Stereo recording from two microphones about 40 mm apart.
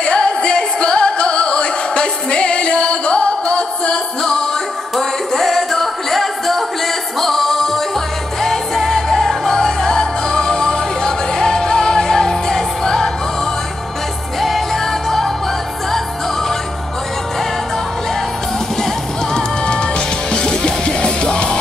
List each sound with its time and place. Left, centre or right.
0.0 s music: left
14.4 s music: centre
19.3 s music: left